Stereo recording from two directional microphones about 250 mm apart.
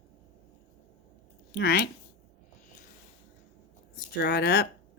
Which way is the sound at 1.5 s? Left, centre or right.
Left.